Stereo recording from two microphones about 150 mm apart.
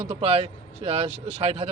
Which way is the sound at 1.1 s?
10° right (ahead or behind).